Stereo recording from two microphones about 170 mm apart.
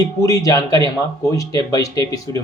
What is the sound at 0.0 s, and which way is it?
Speech, 20° left (ahead or behind).